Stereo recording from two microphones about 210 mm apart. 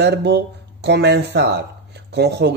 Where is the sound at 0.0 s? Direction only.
55° right (ahead or behind).